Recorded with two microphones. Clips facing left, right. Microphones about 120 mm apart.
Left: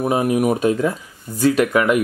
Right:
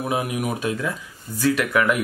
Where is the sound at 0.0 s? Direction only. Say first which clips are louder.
Left 7 dB; 40° left (ahead or behind).